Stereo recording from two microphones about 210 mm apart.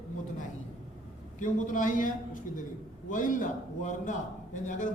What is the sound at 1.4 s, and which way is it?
A man's voice, 40° left (ahead or behind).